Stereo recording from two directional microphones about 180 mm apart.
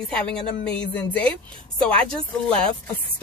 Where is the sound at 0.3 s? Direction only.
5° left (ahead or behind).